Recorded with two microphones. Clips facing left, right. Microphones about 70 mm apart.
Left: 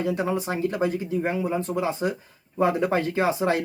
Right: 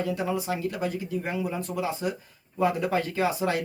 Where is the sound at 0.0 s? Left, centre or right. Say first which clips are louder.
Left 3 dB; left.